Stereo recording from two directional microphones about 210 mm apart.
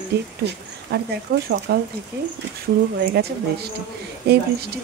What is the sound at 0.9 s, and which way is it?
Speech, 50° right (ahead or behind).